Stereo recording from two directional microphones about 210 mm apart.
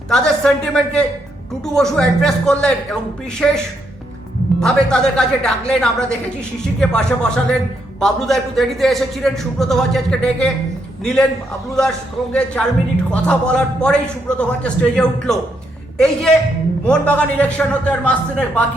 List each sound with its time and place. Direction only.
0.1 s a man's voice: 5° left (ahead or behind)
4.6 s a man's voice: 5° left (ahead or behind)
16.8 s a man's voice: 5° left (ahead or behind)